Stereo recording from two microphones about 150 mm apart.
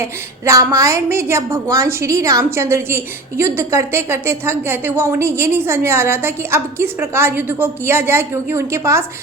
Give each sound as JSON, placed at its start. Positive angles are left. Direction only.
{"t": 0.0, "sound": "a woman's voice", "side_deg": -20}